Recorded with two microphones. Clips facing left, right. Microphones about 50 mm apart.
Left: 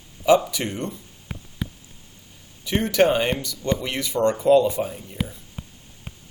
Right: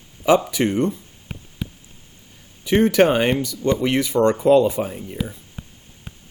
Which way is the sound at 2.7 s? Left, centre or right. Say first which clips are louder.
Right 4 dB; right.